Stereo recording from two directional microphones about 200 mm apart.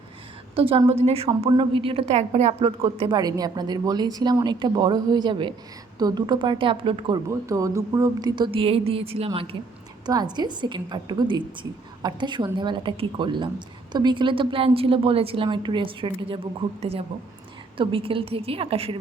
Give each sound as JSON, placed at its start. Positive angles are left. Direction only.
{"t": 0.5, "sound": "a woman's voice", "side_deg": -30}
{"t": 7.3, "sound": "a woman's voice", "side_deg": -15}